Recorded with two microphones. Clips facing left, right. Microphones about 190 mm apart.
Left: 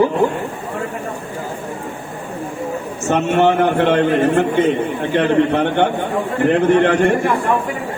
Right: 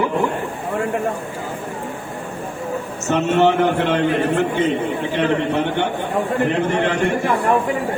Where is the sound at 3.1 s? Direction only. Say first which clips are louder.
Left 1 dB; 55° left (ahead or behind).